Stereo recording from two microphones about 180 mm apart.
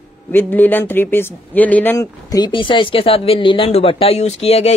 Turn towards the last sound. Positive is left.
turn(degrees=35)  # may be behind; listen again after turning